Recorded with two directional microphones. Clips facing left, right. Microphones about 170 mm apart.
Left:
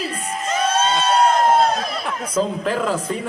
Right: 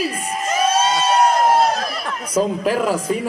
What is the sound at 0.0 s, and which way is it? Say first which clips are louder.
Crowd: right 3 dB; 10° right (ahead or behind).